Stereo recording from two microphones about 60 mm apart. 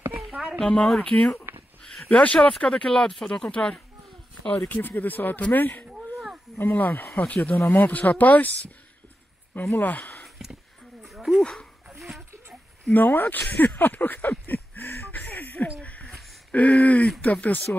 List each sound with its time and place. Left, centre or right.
0.0 s a sound: right
0.6 s speech: centre
3.4 s speech: centre
4.6 s speech: left
7.5 s speech: left
9.8 s speech: left
10.2 s a sound: centre
12.9 s speech: left